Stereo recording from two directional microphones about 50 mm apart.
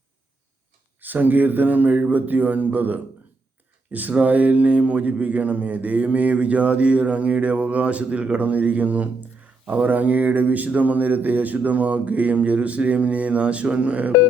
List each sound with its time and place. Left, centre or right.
1.0 s speech: right